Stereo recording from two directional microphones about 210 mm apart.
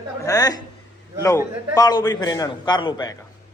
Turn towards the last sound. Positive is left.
turn(degrees=20)  # may be behind; listen again after turning